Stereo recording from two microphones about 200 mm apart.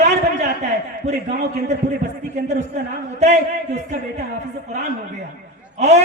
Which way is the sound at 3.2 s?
35° right (ahead or behind).